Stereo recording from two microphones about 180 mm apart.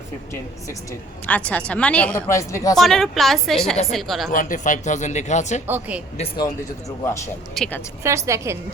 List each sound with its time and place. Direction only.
1.3 s speech: 5° left (ahead or behind)
2.7 s a woman's voice: centre (ahead or behind)
4.3 s speech: 45° left (ahead or behind)
5.6 s a woman's voice: 10° right (ahead or behind)
6.1 s speech: 30° left (ahead or behind)
7.5 s a woman's voice: 5° left (ahead or behind)
8.0 s a woman's voice: 15° right (ahead or behind)